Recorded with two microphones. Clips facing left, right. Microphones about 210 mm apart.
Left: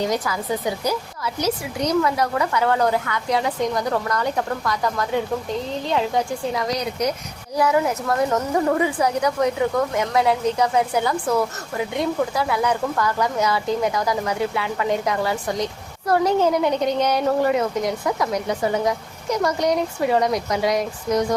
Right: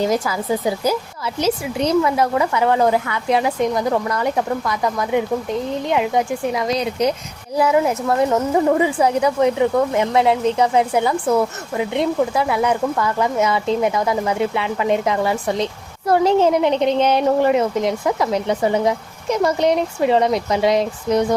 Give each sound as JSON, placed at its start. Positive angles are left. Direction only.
{"t": 0.0, "sound": "speech", "side_deg": -25}